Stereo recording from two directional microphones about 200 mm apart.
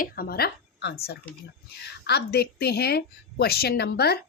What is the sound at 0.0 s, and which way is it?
A woman's voice, 50° left (ahead or behind).